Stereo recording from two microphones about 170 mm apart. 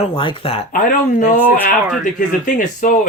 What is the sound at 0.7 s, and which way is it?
Speech, 50° left (ahead or behind).